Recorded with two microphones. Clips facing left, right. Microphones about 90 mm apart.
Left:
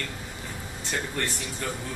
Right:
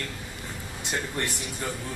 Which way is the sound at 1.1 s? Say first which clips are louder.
Even; 15° right (ahead or behind).